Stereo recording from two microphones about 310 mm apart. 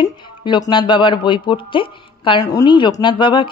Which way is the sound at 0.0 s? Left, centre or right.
Centre.